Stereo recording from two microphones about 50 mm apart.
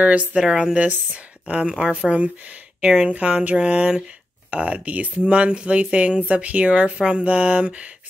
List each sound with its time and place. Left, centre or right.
0.0 s speech: right
0.4 s speech: centre
0.7 s speech: right
2.8 s speech: centre
3.1 s speech: right